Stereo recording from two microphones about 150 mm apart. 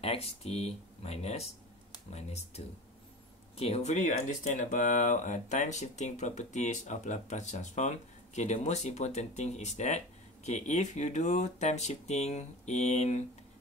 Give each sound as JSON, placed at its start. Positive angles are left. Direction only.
{"t": 0.0, "sound": "speech", "side_deg": 45}